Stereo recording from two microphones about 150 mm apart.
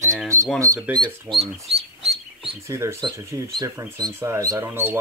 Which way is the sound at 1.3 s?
10° right (ahead or behind).